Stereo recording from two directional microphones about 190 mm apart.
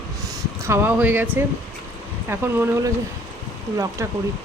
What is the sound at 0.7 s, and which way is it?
Speech, 10° right (ahead or behind).